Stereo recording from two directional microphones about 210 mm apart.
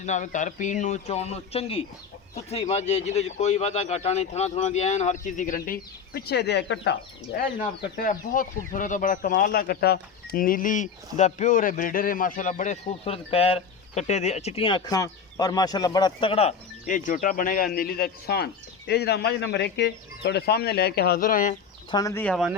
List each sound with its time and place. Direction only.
0.0 s speech: 35° left (ahead or behind); by 6.9 s 55° left (ahead or behind)
7.3 s speech: 45° left (ahead or behind)
21.9 s speech: 15° left (ahead or behind)